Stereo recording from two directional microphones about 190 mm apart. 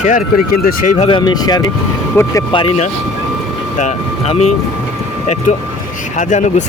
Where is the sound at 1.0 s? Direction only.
25° left (ahead or behind).